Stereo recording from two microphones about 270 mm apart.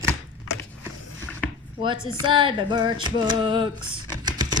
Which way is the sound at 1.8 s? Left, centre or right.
Centre.